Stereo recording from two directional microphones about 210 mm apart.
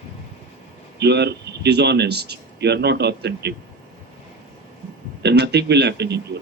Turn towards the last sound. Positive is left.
turn(degrees=-55)  # may be behind; listen again after turning